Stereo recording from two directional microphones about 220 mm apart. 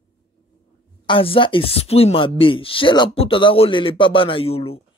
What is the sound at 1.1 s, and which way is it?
Speech, 25° left (ahead or behind).